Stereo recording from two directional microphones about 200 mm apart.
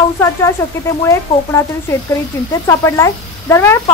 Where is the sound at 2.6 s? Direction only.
15° left (ahead or behind).